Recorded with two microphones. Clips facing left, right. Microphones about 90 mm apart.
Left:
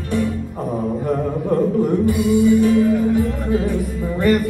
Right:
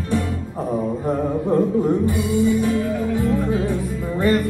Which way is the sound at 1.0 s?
15° right (ahead or behind).